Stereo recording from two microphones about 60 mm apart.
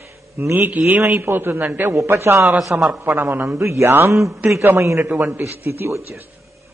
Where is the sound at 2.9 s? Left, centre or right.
Right.